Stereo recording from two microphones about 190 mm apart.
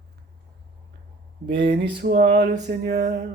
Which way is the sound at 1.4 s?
60° right (ahead or behind).